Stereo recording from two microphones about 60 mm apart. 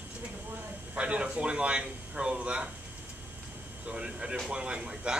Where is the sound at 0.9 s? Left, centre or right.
Centre.